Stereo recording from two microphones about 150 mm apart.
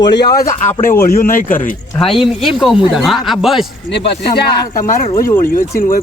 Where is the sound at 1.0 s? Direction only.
65° left (ahead or behind).